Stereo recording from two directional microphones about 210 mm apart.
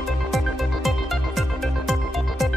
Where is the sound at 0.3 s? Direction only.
Centre (ahead or behind).